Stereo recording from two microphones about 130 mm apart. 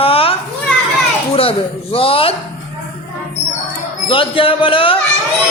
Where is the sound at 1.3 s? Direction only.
45° left (ahead or behind).